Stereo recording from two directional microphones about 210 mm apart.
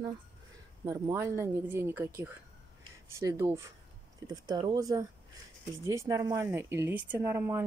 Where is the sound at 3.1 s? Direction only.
15° right (ahead or behind).